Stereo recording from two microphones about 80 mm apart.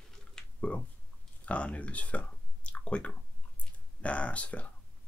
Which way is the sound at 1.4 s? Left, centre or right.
Centre.